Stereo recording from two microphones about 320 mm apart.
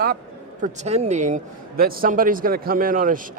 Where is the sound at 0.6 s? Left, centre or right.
Centre.